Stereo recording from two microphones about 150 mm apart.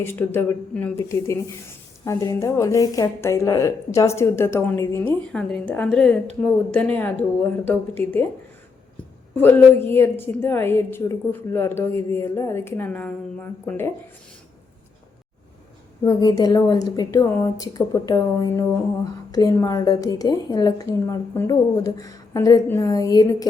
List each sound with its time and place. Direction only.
0.0 s a woman's voice: 15° left (ahead or behind)
1.0 s speech: 20° left (ahead or behind)
5.3 s a woman's voice: 5° left (ahead or behind)
9.3 s a woman's voice: 15° left (ahead or behind)
16.0 s speech: 25° left (ahead or behind)